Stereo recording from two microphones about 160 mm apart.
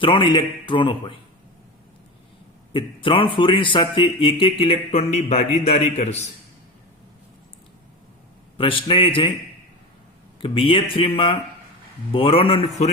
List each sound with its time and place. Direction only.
0.0 s speech: 30° left (ahead or behind)
2.7 s speech: 35° left (ahead or behind)
8.5 s speech: 35° left (ahead or behind)
10.4 s speech: 35° left (ahead or behind)